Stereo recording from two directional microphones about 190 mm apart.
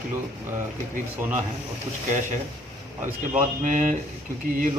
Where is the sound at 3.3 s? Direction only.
45° right (ahead or behind).